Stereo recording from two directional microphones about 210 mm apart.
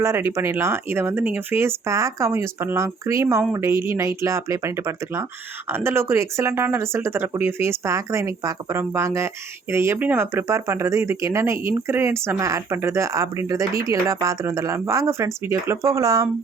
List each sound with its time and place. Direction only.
0.0 s speech: 15° right (ahead or behind)